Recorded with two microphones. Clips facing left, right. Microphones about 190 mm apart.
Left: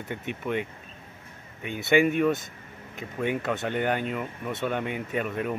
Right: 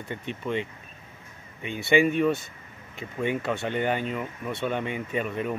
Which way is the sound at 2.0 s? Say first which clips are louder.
Even; 5° left (ahead or behind).